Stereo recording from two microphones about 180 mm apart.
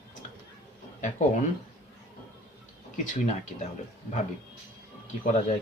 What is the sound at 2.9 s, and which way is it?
Speech, 40° left (ahead or behind).